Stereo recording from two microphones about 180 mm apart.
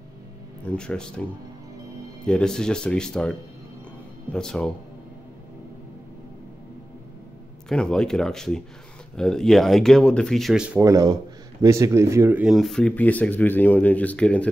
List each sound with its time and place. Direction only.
0.7 s speech: 5° left (ahead or behind)
2.2 s speech: 5° left (ahead or behind)
7.6 s speech: 5° left (ahead or behind)
10.8 s speech: 20° right (ahead or behind); by 14.5 s 5° left (ahead or behind)